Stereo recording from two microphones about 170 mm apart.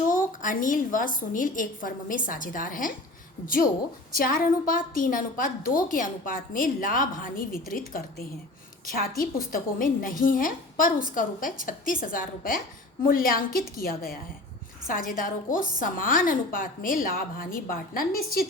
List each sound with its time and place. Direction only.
0.1 s a woman's voice: 50° left (ahead or behind)